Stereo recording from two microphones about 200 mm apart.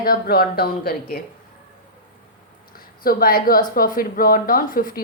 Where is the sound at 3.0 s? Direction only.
45° left (ahead or behind).